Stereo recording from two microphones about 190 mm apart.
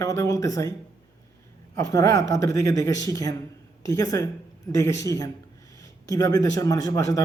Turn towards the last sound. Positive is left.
turn(degrees=20)  # may be behind; listen again after turning